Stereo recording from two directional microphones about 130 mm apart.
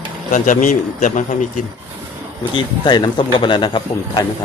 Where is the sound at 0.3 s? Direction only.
90° left.